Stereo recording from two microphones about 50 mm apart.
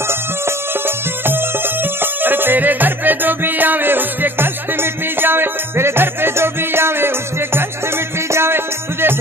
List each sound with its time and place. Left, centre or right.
0.5 s music: right
8.3 s music: right